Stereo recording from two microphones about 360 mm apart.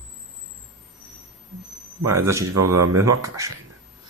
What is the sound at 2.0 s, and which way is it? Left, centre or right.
Speech, centre.